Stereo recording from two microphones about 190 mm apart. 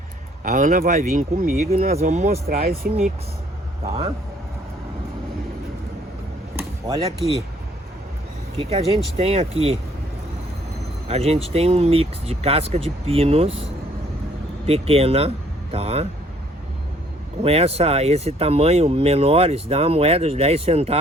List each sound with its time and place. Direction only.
0.4 s speech: 45° right (ahead or behind)
2.6 s speech: 50° right (ahead or behind)
6.6 s a sound: 20° right (ahead or behind)
8.5 s speech: 30° right (ahead or behind)
11.1 s speech: 30° right (ahead or behind)
14.7 s speech: 30° right (ahead or behind)
17.4 s speech: 30° right (ahead or behind)